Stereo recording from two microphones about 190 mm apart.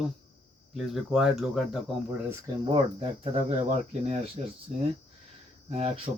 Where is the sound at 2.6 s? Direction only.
25° right (ahead or behind).